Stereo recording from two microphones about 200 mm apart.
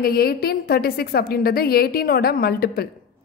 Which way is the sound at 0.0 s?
50° left (ahead or behind).